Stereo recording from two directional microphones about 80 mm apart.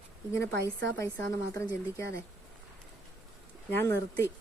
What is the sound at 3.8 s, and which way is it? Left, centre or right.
Speech, left.